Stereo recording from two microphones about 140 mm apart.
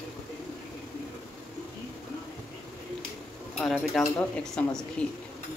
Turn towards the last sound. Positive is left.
turn(degrees=5)  # may be behind; listen again after turning